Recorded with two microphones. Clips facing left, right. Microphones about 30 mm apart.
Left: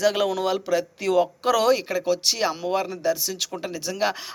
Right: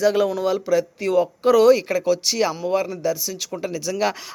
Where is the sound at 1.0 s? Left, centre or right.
Left.